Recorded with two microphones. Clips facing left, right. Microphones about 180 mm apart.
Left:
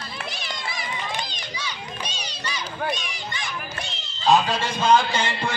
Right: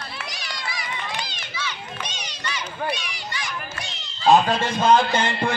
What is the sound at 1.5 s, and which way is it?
Run, 15° left (ahead or behind).